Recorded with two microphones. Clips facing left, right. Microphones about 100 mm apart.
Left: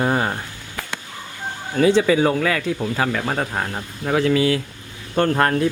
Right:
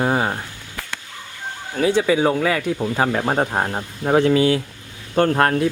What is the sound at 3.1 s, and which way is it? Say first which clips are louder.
Speech: right 3 dB; 30° right (ahead or behind).